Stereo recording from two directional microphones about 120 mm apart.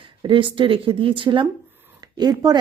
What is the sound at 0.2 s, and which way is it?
Speech, 45° right (ahead or behind).